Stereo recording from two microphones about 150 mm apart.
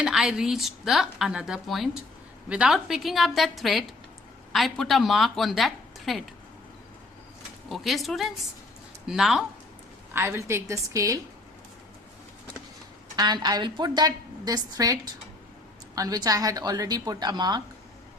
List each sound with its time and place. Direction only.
0.0 s a woman's voice: 5° right (ahead or behind)
7.7 s a woman's voice: centre (ahead or behind)
10.1 s a woman's voice: 15° right (ahead or behind)
13.1 s a woman's voice: 30° right (ahead or behind)